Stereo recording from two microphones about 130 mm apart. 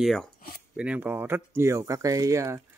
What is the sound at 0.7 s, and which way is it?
Speech, 10° right (ahead or behind).